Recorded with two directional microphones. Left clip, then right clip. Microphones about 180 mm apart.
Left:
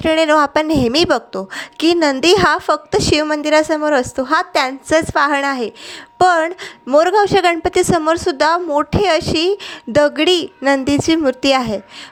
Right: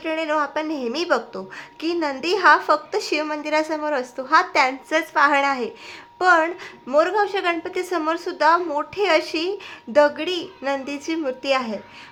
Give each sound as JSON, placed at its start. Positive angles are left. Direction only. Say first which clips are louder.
{"t": 0.0, "sound": "a woman's voice", "louder": "left 10 dB", "side_deg": 50}